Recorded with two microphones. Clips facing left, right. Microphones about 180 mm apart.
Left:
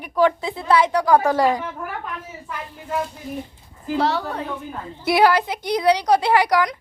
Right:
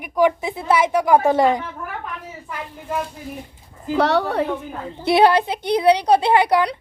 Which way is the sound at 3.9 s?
70° right (ahead or behind).